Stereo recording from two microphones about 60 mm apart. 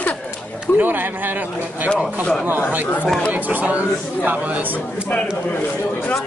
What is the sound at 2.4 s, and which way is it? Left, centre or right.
A man's voice, right.